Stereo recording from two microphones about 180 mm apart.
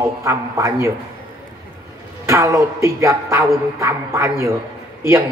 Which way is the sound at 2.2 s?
15° right (ahead or behind).